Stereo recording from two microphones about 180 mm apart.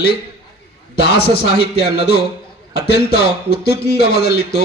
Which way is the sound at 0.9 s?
65° left (ahead or behind).